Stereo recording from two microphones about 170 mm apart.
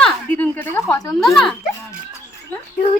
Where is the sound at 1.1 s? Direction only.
Centre (ahead or behind).